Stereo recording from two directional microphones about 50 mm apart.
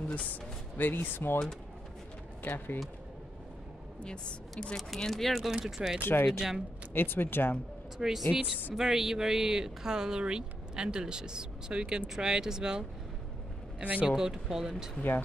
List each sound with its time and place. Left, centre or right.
0.1 s speech: left
2.4 s speech: left
4.0 s a woman's voice: centre
4.7 s speech: centre
6.9 s speech: left
8.3 s speech: centre
13.7 s speech: right
14.0 s speech: centre
15.0 s speech: left